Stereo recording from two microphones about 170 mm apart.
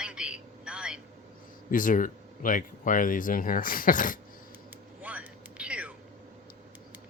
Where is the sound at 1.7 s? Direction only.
50° left (ahead or behind).